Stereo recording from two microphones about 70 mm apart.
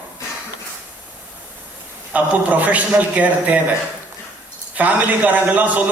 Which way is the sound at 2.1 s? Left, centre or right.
Right.